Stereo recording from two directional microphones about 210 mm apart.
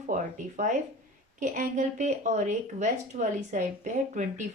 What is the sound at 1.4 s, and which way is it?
Speech, 35° right (ahead or behind).